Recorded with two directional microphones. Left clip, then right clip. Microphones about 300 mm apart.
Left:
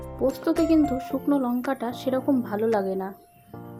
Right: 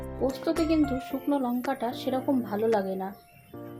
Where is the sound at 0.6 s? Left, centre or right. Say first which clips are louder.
Left 5 dB; centre.